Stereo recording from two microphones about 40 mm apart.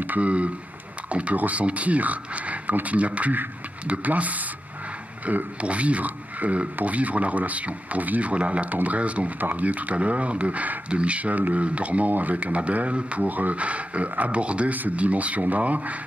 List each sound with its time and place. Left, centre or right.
0.0 s speech: right
14.7 s speech: right